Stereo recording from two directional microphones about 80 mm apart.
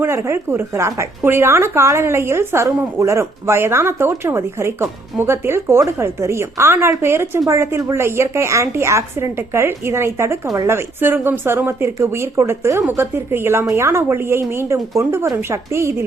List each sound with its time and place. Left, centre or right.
0.0 s a woman's voice: right
10.7 s a woman's voice: right